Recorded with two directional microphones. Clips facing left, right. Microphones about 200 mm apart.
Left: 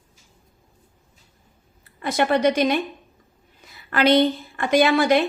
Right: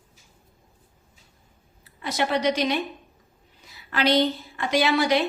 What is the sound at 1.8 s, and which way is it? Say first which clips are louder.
A woman's voice: left 4 dB; 50° left (ahead or behind).